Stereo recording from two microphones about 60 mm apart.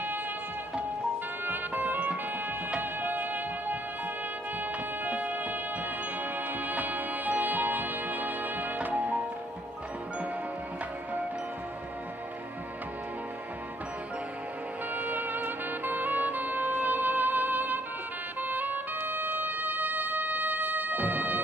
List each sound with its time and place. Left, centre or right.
1.4 s music: right
5.0 s music: right
15.0 s music: right